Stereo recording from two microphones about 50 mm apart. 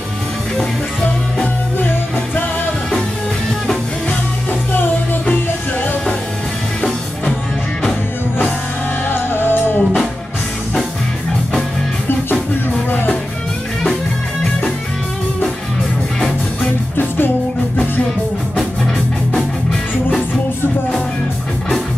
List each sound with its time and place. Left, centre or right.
4.5 s music: left
9.1 s music: left
16.9 s music: left
19.3 s music: centre